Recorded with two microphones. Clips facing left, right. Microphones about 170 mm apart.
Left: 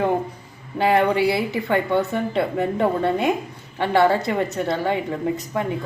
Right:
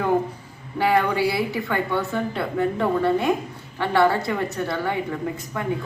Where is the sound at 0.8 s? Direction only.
25° left (ahead or behind).